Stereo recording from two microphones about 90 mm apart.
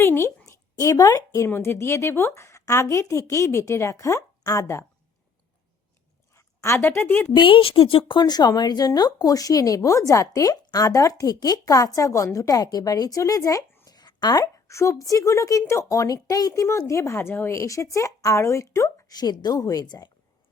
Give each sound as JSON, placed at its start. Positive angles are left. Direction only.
{"t": 0.0, "sound": "a woman's voice", "side_deg": 25}
{"t": 0.8, "sound": "a woman's voice", "side_deg": 40}
{"t": 1.5, "sound": "a woman's voice", "side_deg": 25}
{"t": 6.3, "sound": "a sound", "side_deg": 35}
{"t": 6.7, "sound": "speech", "side_deg": 25}
{"t": 7.3, "sound": "a woman's voice", "side_deg": 75}
{"t": 13.8, "sound": "a sound", "side_deg": 50}
{"t": 14.7, "sound": "a woman's voice", "side_deg": 35}
{"t": 19.1, "sound": "a woman's voice", "side_deg": 50}